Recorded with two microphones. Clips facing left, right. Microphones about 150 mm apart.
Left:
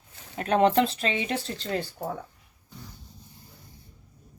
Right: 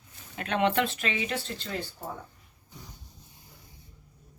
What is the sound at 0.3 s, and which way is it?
Speech, 40° left (ahead or behind).